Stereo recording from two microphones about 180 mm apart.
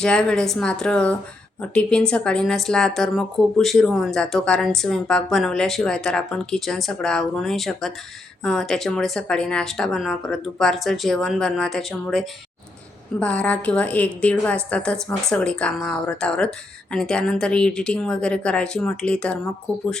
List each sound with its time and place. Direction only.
0.0 s a woman's voice: 5° left (ahead or behind)